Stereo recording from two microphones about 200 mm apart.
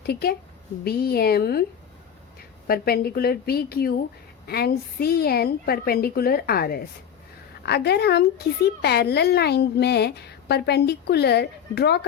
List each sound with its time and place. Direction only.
0.0 s a woman's voice: 55° left (ahead or behind)
2.6 s a woman's voice: 50° left (ahead or behind)